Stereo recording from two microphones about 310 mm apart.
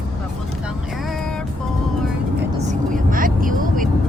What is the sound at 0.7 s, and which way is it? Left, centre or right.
Vehicle, centre.